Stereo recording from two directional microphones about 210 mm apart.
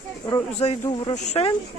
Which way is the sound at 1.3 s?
30° left (ahead or behind).